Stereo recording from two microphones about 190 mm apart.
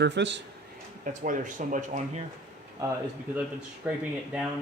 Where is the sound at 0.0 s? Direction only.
70° right (ahead or behind).